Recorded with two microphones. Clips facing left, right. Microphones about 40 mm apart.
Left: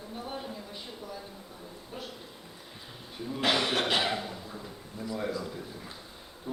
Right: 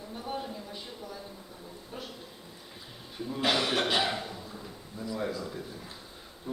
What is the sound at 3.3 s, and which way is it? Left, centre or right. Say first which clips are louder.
A man's voice: even; centre.